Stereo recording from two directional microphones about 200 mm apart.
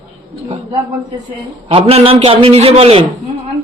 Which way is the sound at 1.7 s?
30° right (ahead or behind).